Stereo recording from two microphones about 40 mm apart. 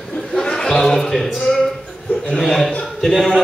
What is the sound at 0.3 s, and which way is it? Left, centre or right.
A man's voice, centre.